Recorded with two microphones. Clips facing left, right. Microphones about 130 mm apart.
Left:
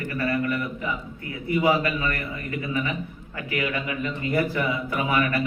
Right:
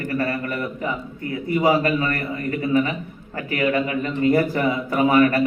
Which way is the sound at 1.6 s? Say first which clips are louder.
Right 4 dB; 40° right (ahead or behind).